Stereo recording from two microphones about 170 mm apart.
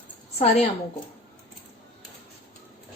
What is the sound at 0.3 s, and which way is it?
Speech, 35° left (ahead or behind).